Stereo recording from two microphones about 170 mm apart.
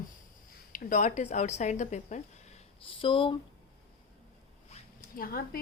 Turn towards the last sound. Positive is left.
turn(degrees=60)  # may be behind; listen again after turning